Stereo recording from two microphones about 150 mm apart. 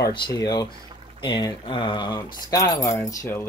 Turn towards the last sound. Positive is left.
turn(degrees=15)  # may be behind; listen again after turning